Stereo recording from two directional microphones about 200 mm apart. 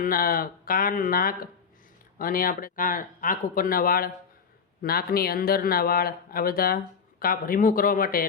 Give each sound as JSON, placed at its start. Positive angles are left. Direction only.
{"t": 0.0, "sound": "speech", "side_deg": 45}